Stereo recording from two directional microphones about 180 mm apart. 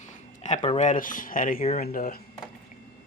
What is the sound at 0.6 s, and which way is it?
Speech, 35° left (ahead or behind).